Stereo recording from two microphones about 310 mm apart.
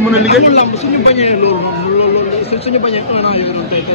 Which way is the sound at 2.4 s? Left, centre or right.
Centre.